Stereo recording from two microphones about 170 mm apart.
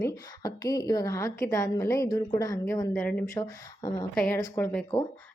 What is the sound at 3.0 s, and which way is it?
Speech, 5° left (ahead or behind).